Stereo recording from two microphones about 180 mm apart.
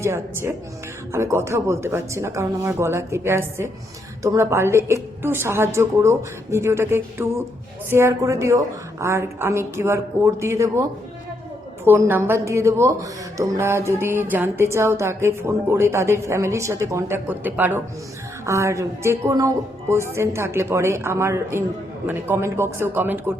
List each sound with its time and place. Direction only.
0.0 s a woman's voice: 15° right (ahead or behind)
11.9 s a woman's voice: 10° right (ahead or behind)